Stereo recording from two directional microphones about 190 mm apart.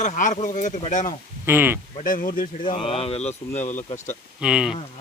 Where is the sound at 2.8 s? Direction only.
30° left (ahead or behind).